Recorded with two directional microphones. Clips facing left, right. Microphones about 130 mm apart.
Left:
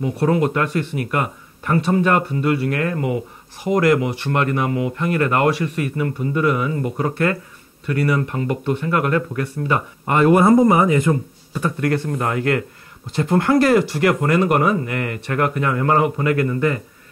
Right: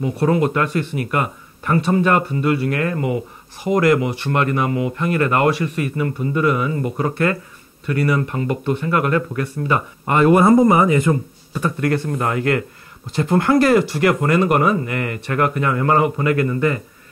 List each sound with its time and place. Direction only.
0.2 s speech: 25° right (ahead or behind)